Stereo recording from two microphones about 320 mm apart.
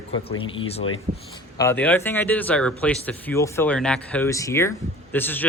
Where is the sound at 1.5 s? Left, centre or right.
Centre.